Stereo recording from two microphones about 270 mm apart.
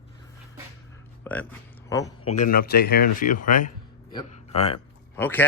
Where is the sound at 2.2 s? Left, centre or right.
Left.